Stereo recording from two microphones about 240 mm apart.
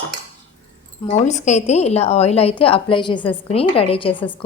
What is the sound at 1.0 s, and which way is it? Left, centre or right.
A woman's voice, left.